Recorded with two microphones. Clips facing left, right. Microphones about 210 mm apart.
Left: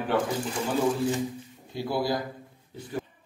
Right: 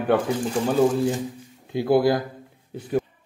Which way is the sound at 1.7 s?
55° right (ahead or behind).